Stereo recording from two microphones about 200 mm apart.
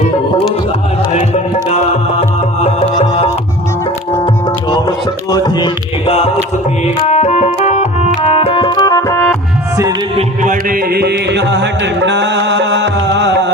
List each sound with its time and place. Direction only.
1.1 s music: 35° left (ahead or behind)
4.7 s music: 20° left (ahead or behind)
6.8 s organ: 35° left (ahead or behind); by 9.3 s 10° left (ahead or behind)
10.2 s music: 40° right (ahead or behind); by 13.5 s 60° right (ahead or behind)